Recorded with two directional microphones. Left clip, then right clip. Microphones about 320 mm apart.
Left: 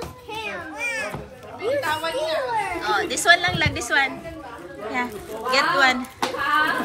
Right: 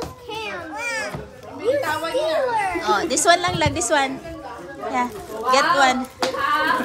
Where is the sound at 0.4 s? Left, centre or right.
Centre.